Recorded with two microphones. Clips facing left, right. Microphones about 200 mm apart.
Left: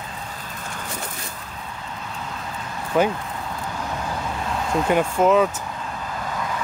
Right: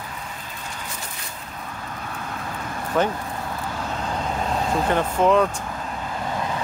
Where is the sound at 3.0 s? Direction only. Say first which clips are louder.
Left 2 dB; 10° left (ahead or behind).